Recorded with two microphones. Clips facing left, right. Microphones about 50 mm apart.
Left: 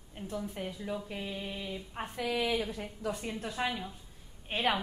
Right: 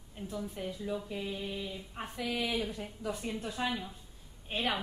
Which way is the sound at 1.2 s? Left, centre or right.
Centre.